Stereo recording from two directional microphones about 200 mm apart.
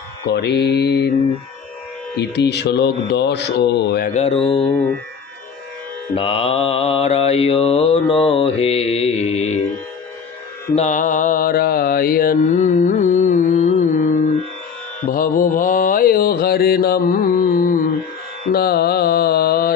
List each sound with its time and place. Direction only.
0.3 s speech: 55° left (ahead or behind)
2.1 s speech: 60° left (ahead or behind)
4.1 s mantra: 30° left (ahead or behind)
6.1 s mantra: 30° left (ahead or behind)
10.7 s mantra: 35° left (ahead or behind)
18.5 s music: 50° left (ahead or behind)